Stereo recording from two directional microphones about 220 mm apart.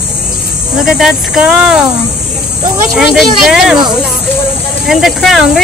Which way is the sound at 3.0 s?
Centre (ahead or behind).